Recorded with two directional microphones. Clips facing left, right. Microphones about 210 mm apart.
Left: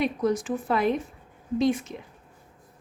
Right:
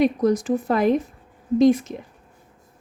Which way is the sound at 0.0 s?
40° right (ahead or behind).